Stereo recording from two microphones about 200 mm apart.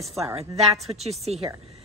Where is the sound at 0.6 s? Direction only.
Centre (ahead or behind).